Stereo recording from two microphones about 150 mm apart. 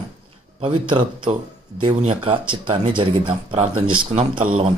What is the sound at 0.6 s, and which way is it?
Speech, 35° right (ahead or behind).